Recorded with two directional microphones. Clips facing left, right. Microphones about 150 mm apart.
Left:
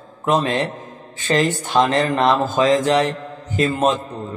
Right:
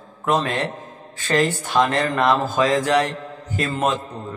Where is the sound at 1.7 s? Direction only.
25° left (ahead or behind).